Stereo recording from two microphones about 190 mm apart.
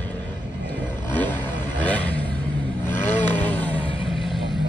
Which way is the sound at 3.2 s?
10° left (ahead or behind).